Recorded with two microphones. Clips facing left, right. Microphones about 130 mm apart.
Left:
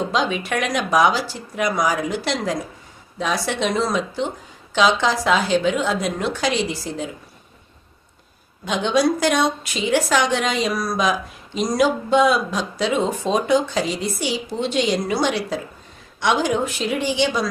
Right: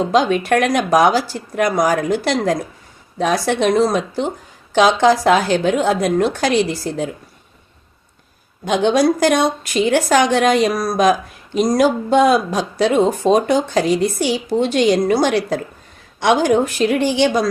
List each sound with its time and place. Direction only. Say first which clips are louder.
0.1 s a woman's voice: right 7 dB; 55° right (ahead or behind)
8.6 s a woman's voice: right 4 dB; 55° right (ahead or behind)